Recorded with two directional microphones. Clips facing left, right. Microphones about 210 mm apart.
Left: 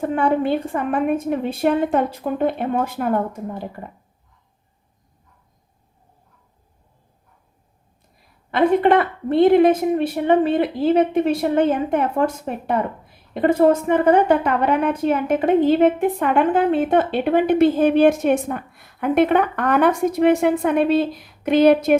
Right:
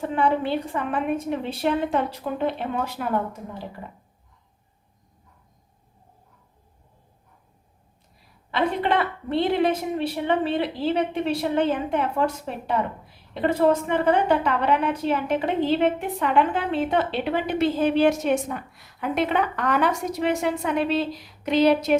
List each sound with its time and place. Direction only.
0.0 s a woman's voice: 50° left (ahead or behind)
8.4 s a woman's voice: 50° left (ahead or behind)